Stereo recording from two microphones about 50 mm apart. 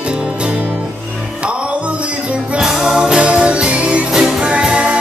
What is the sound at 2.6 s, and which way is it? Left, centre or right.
Music, centre.